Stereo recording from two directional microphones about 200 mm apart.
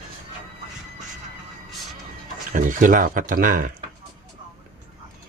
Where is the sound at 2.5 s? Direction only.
40° right (ahead or behind).